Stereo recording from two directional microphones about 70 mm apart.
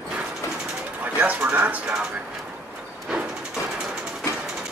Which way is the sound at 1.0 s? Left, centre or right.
Right.